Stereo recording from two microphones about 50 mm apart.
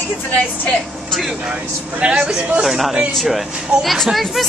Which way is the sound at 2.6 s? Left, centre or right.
Centre.